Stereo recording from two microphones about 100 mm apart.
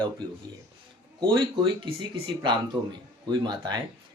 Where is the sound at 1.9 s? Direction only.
55° right (ahead or behind).